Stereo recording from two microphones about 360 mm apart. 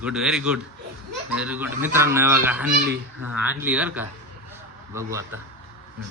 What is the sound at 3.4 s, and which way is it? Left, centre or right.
Speech, centre.